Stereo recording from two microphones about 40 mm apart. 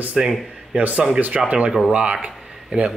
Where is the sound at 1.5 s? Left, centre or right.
Right.